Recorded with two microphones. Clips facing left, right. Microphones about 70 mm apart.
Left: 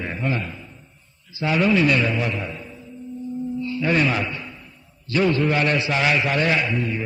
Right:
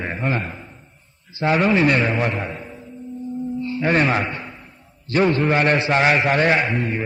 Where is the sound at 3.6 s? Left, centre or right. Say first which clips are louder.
Right 2 dB; right.